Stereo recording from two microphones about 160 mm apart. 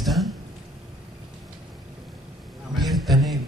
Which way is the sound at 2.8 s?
Centre (ahead or behind).